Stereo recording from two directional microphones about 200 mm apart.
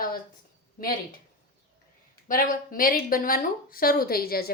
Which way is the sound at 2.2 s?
45° left (ahead or behind).